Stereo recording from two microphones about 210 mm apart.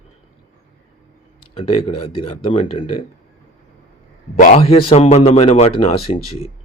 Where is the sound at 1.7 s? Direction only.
25° left (ahead or behind).